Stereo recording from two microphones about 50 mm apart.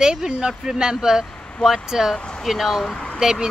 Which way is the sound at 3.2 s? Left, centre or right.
Centre.